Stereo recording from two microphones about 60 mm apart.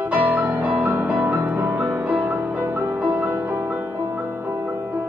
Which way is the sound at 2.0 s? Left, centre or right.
Right.